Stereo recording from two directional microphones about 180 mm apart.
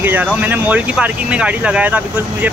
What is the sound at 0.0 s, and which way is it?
Speech, 10° right (ahead or behind).